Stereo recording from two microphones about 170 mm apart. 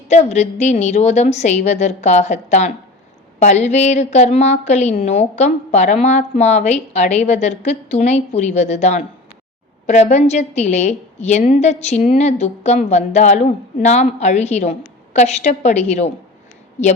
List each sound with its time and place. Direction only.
0.1 s a woman's voice: 40° left (ahead or behind)